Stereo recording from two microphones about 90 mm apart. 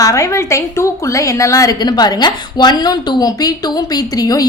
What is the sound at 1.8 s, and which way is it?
A woman's voice, 50° left (ahead or behind).